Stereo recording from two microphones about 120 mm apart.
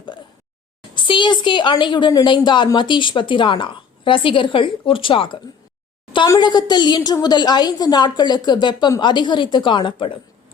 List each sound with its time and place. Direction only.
0.9 s a woman's voice: 40° left (ahead or behind)
6.2 s a woman's voice: 30° left (ahead or behind)